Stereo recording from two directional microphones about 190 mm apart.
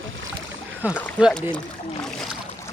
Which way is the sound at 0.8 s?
10° right (ahead or behind).